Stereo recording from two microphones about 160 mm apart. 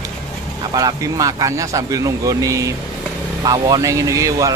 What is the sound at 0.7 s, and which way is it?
A man's voice, 25° right (ahead or behind).